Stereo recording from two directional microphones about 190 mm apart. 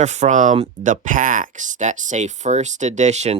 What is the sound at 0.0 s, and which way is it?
Speech, 40° right (ahead or behind).